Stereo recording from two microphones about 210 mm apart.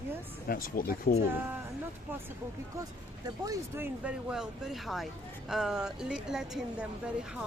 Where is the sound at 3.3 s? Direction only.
15° right (ahead or behind).